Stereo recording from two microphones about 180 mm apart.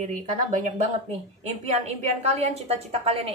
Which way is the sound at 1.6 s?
40° right (ahead or behind).